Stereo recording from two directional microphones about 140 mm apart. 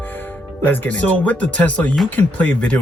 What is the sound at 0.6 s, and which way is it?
Speech, 10° left (ahead or behind).